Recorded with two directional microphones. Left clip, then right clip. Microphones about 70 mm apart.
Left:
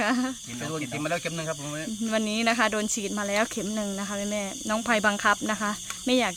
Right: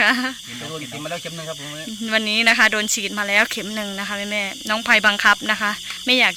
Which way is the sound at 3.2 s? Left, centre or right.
Centre.